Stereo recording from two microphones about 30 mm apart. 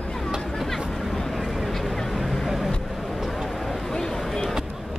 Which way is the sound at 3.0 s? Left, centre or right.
Centre.